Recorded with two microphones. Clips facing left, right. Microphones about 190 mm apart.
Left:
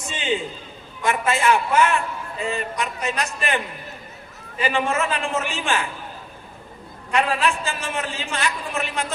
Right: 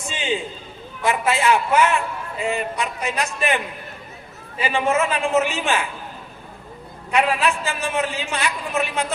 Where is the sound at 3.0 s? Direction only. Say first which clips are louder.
Right 4 dB; 15° right (ahead or behind).